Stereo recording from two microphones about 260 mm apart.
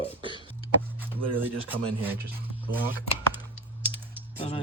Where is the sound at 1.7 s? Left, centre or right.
Centre.